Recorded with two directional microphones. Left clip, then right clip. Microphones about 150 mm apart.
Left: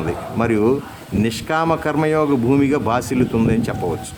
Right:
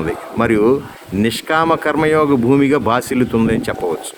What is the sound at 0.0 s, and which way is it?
A man's voice, 20° right (ahead or behind).